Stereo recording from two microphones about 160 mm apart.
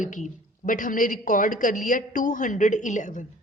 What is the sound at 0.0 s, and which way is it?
A woman's voice, 55° left (ahead or behind).